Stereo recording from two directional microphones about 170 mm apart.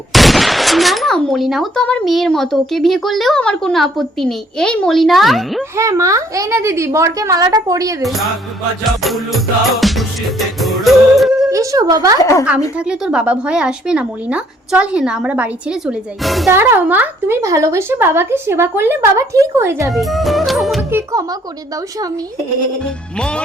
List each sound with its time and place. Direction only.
0.1 s speech: centre (ahead or behind)
5.7 s a child's voice: 20° right (ahead or behind)
8.0 s speech: centre (ahead or behind)
9.8 s music: centre (ahead or behind)
11.4 s a child's voice: 20° right (ahead or behind)
12.2 s a woman's voice: 20° left (ahead or behind)
12.7 s speech: 5° right (ahead or behind)
16.5 s speech: 15° right (ahead or behind)
19.9 s speech: centre (ahead or behind)
20.9 s a child's voice: 20° right (ahead or behind)
23.1 s speech: 5° left (ahead or behind)